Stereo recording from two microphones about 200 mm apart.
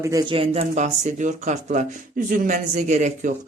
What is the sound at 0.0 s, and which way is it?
Speech, 15° right (ahead or behind).